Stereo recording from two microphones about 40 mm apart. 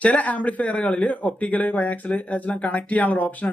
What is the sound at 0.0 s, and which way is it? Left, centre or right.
Speech, left.